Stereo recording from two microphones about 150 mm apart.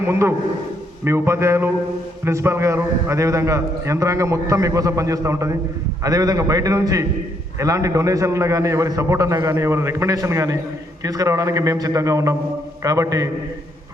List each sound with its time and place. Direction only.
0.1 s a man's voice: 20° right (ahead or behind)